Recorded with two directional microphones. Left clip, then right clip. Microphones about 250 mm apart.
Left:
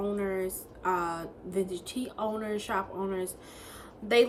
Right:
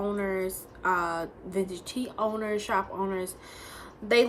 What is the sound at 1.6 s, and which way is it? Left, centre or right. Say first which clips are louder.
Speech: right 1 dB; right.